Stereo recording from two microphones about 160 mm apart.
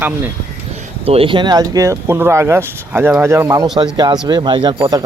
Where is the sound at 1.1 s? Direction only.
35° right (ahead or behind).